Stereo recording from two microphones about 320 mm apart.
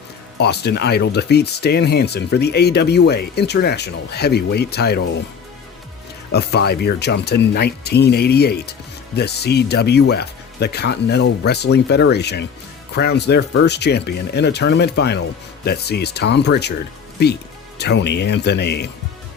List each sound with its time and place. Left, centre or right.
0.3 s speech: left
6.3 s speech: left